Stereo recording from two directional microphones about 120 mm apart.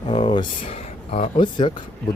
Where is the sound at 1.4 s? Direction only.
40° left (ahead or behind).